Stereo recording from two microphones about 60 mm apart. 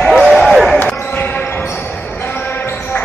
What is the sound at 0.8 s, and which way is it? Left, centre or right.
Basketball bounce, left.